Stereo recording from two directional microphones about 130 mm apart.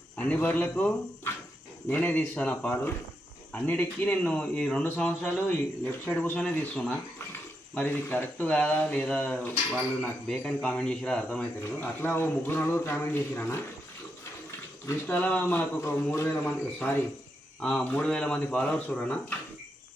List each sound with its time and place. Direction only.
0.2 s speech: 10° left (ahead or behind)
14.8 s speech: 15° left (ahead or behind)